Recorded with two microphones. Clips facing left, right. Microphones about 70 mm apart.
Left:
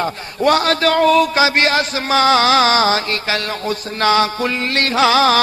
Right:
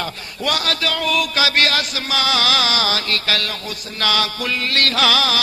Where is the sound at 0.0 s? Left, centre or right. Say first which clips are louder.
Left 8 dB; left.